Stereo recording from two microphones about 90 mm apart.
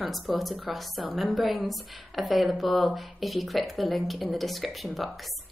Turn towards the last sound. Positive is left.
turn(degrees=0)  # may be behind; listen again after turning